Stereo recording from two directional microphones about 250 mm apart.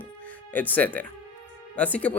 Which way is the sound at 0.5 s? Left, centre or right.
Centre.